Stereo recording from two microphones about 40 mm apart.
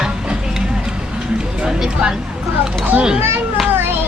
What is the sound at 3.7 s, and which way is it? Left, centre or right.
Children playing, right.